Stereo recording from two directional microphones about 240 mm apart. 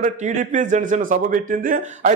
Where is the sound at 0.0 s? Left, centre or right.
Right.